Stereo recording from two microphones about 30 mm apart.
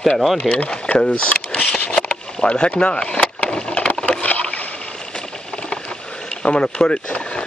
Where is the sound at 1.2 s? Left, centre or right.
Left.